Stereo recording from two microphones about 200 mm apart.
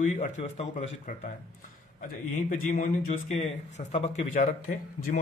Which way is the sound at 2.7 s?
35° left (ahead or behind).